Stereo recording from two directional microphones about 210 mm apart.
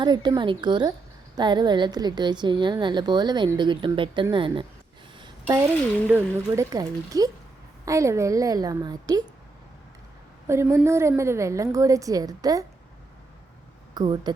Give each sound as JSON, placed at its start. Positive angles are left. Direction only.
{"t": 0.0, "sound": "a woman's voice", "side_deg": -20}
{"t": 5.2, "sound": "a sound", "side_deg": -15}
{"t": 6.1, "sound": "a woman's voice", "side_deg": -10}
{"t": 10.4, "sound": "a woman's voice", "side_deg": -15}
{"t": 13.9, "sound": "speech", "side_deg": -20}